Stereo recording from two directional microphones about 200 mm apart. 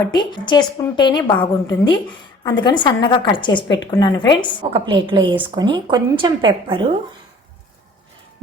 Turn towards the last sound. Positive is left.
turn(degrees=-25)  # may be behind; listen again after turning